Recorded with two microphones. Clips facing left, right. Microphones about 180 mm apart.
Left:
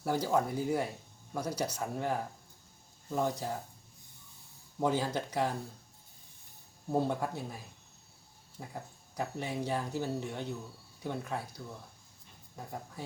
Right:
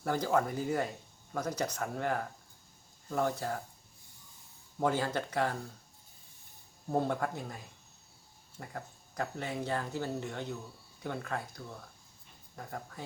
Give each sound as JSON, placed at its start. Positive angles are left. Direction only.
{"t": 0.0, "sound": "speech", "side_deg": 10}
{"t": 4.8, "sound": "speech", "side_deg": 15}
{"t": 6.9, "sound": "speech", "side_deg": 10}